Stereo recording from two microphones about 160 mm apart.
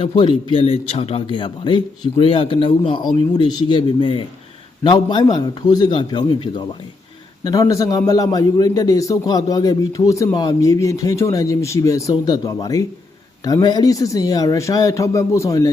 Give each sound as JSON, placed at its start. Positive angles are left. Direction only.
{"t": 0.0, "sound": "a man's voice", "side_deg": 30}